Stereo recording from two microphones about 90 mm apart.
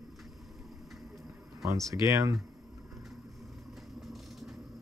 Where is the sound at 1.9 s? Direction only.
35° right (ahead or behind).